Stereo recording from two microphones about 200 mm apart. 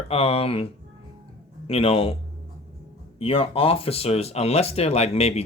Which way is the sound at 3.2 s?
30° left (ahead or behind).